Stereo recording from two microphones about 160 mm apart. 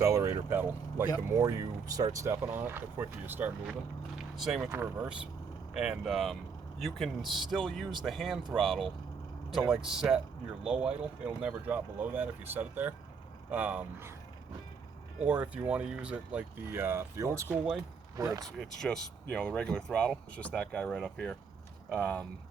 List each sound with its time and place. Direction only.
0.0 s speech: 20° right (ahead or behind)
4.4 s speech: centre (ahead or behind)
15.2 s speech: 5° right (ahead or behind)
18.8 s speech: 5° left (ahead or behind)